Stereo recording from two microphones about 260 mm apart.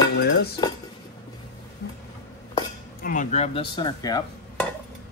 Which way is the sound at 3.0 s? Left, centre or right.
Left.